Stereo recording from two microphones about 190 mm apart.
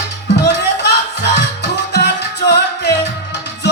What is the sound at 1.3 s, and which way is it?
Music, 65° left (ahead or behind).